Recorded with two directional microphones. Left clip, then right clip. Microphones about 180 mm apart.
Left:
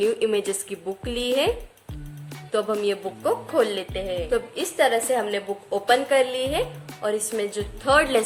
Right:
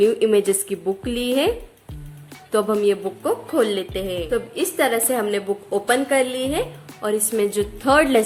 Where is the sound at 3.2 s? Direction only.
Centre (ahead or behind).